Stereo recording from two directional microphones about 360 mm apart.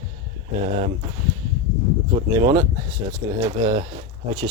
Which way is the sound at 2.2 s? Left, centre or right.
Centre.